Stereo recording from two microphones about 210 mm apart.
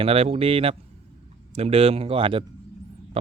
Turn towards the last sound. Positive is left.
turn(degrees=-30)  # may be behind; listen again after turning